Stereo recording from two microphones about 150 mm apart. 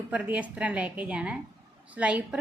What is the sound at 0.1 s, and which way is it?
A woman's voice, 10° right (ahead or behind).